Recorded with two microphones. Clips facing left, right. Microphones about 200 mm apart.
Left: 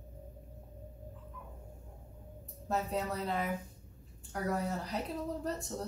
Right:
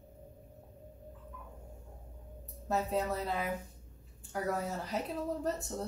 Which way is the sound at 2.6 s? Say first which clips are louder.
Right 2 dB; centre (ahead or behind).